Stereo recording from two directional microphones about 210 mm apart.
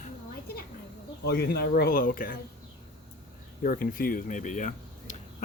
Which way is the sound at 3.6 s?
40° left (ahead or behind).